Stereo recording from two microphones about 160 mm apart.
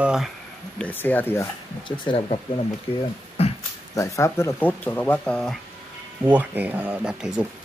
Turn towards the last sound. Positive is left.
turn(degrees=-5)  # may be behind; listen again after turning